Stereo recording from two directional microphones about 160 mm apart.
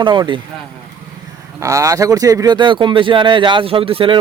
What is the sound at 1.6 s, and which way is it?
Speech, 20° right (ahead or behind).